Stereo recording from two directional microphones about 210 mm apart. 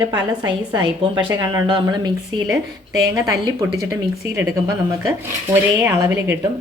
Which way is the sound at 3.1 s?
15° right (ahead or behind).